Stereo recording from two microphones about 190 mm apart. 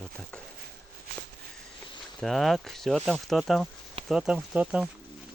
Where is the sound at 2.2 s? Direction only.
Centre (ahead or behind).